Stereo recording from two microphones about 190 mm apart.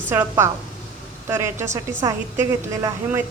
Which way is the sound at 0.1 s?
10° right (ahead or behind).